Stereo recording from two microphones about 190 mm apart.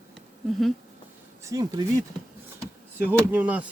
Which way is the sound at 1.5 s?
20° right (ahead or behind).